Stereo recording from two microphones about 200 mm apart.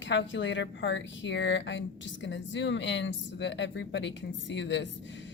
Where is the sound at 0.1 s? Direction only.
65° left (ahead or behind).